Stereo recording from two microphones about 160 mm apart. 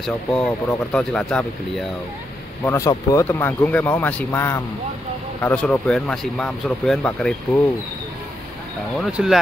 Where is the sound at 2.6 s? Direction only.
20° left (ahead or behind).